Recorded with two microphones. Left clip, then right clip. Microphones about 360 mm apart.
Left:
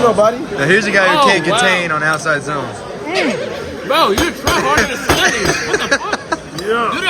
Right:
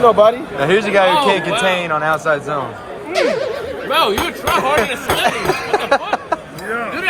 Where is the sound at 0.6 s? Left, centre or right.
Centre.